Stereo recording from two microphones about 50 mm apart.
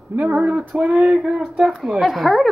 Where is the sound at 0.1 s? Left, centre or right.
Right.